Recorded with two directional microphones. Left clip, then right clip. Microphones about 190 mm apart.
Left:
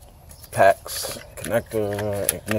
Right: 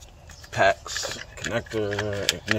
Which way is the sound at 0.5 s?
10° left (ahead or behind).